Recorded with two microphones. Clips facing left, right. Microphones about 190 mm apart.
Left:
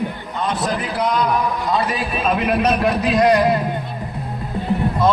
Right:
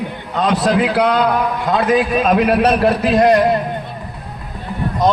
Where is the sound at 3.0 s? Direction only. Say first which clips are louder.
Right 2 dB; 50° right (ahead or behind).